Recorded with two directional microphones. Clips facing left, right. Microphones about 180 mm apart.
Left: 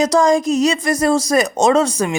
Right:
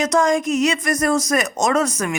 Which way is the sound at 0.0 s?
35° left (ahead or behind).